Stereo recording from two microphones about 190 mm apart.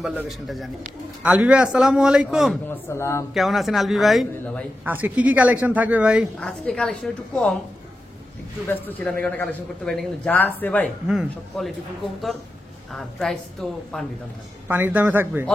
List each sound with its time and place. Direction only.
0.0 s a man's voice: centre (ahead or behind)
2.7 s a man's voice: 15° left (ahead or behind)
3.3 s a man's voice: centre (ahead or behind)
8.6 s a man's voice: 10° left (ahead or behind)
12.9 s a man's voice: centre (ahead or behind)
14.7 s speech: 10° right (ahead or behind)